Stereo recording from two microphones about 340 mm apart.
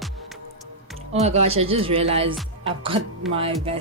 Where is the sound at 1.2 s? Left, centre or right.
Centre.